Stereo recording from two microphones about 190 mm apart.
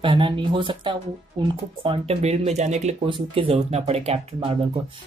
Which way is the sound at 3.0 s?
25° right (ahead or behind).